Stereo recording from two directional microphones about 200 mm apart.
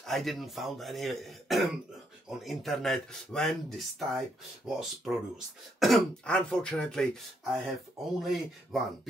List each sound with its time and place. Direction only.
0.0 s speech: centre (ahead or behind)